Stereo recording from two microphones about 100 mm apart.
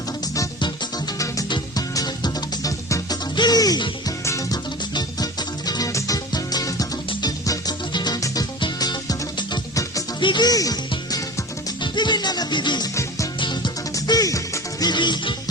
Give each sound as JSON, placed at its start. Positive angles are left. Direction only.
{"t": 1.5, "sound": "music", "side_deg": 45}
{"t": 10.2, "sound": "music", "side_deg": 50}
{"t": 13.9, "sound": "music", "side_deg": 35}
{"t": 14.8, "sound": "music", "side_deg": 50}